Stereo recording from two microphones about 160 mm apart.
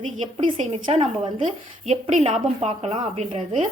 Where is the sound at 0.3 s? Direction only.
35° right (ahead or behind).